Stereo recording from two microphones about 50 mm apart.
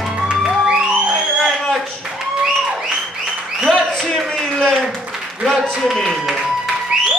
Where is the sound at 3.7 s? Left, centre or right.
Centre.